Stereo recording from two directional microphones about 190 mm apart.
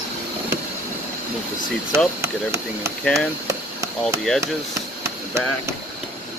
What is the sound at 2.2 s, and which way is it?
Speech, 15° right (ahead or behind).